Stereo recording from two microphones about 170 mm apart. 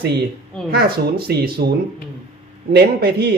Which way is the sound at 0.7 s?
65° right (ahead or behind).